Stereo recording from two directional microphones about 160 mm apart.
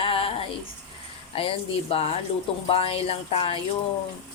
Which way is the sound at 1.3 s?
35° left (ahead or behind).